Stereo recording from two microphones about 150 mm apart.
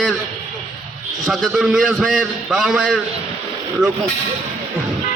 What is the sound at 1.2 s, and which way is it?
A man's voice, centre (ahead or behind).